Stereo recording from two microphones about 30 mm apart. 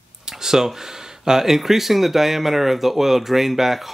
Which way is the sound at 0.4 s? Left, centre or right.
Centre.